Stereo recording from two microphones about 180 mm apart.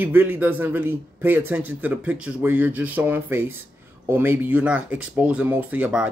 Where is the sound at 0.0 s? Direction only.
10° right (ahead or behind).